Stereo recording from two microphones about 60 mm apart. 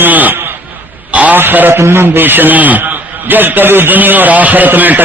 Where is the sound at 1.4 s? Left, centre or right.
Right.